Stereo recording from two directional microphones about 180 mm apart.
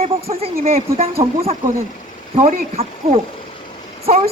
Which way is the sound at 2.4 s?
35° right (ahead or behind).